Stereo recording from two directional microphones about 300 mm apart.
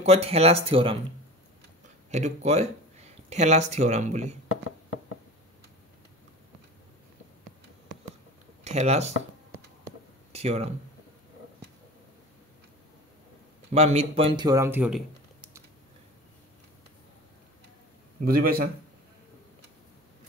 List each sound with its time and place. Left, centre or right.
0.0 s speech: centre
2.0 s speech: right
8.6 s speech: right
9.8 s a sound: right
13.7 s speech: right; by 15.6 s centre
18.2 s speech: right